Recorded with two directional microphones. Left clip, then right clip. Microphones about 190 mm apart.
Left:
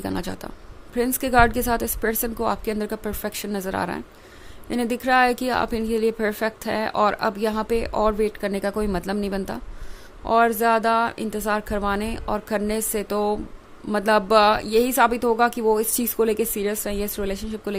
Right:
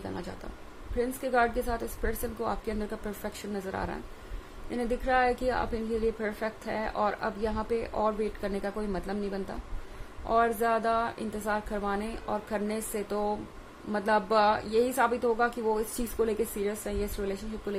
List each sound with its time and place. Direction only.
0.0 s a woman's voice: 55° left (ahead or behind)